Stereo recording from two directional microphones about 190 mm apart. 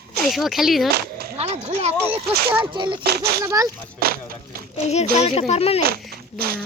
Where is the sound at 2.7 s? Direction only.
25° right (ahead or behind).